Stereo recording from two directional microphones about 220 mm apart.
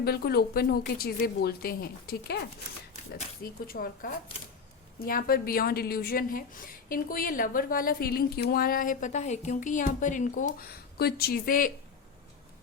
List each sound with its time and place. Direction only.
0.0 s a woman's voice: 45° left (ahead or behind)